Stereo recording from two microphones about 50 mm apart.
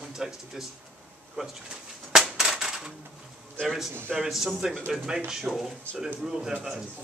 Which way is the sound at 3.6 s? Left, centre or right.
Centre.